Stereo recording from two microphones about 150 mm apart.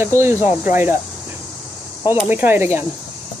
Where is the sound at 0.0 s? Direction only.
15° right (ahead or behind).